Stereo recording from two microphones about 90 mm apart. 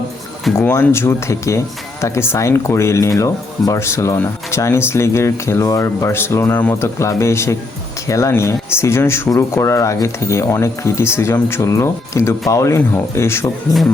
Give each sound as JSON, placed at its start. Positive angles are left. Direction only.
{"t": 0.6, "sound": "speech", "side_deg": 25}
{"t": 6.7, "sound": "speech", "side_deg": 30}